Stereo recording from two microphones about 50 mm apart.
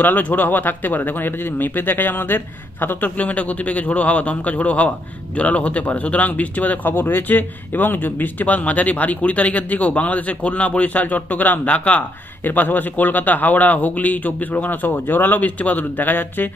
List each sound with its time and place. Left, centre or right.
0.0 s a man's voice: left
3.2 s a man's voice: left
12.4 s a man's voice: left